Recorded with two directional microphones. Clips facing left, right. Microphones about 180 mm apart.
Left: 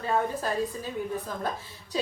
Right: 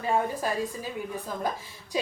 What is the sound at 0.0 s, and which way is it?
A woman's voice, 10° right (ahead or behind).